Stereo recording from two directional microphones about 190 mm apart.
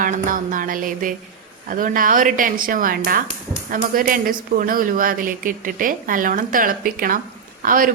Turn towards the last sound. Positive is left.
turn(degrees=-45)  # may be behind; listen again after turning